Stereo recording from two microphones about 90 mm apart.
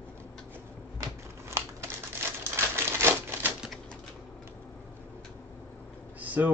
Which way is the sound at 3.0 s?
25° right (ahead or behind).